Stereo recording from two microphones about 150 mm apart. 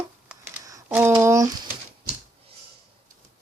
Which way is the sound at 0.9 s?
15° right (ahead or behind).